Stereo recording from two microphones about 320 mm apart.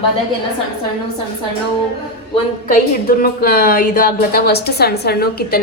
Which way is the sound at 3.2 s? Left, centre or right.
Left.